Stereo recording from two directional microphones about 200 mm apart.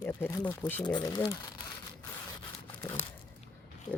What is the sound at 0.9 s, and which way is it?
Speech, 20° left (ahead or behind).